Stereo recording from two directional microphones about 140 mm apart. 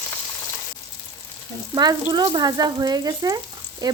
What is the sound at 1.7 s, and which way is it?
Speech, 25° right (ahead or behind).